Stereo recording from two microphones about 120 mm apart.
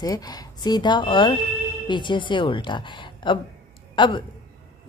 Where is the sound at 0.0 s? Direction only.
30° left (ahead or behind).